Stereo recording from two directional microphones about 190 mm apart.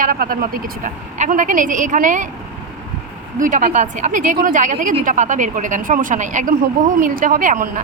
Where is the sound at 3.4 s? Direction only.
45° right (ahead or behind).